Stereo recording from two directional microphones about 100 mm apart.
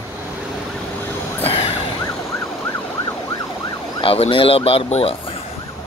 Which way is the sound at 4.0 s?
65° left (ahead or behind).